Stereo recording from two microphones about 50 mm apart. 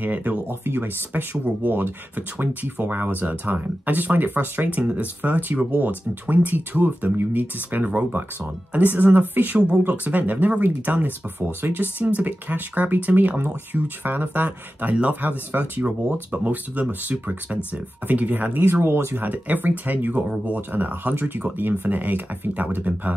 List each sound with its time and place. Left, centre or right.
0.0 s speech: right
0.5 s speech: right
15.5 s speech: right
16.1 s speech: right
18.6 s speech: right
19.2 s speech: right
20.7 s speech: right